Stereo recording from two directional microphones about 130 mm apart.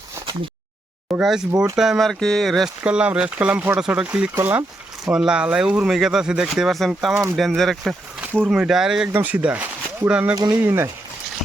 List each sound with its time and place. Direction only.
1.2 s speech: 5° right (ahead or behind)
2.8 s speech: 10° right (ahead or behind)
5.0 s speech: 5° right (ahead or behind)
8.2 s a sound: 15° right (ahead or behind)
8.4 s speech: 5° right (ahead or behind)